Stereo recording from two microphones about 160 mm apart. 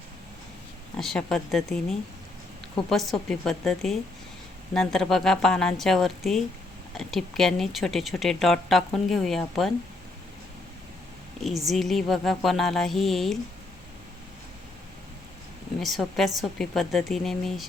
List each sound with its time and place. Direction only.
0.9 s speech: 5° left (ahead or behind)
11.6 s speech: centre (ahead or behind)
15.8 s speech: centre (ahead or behind)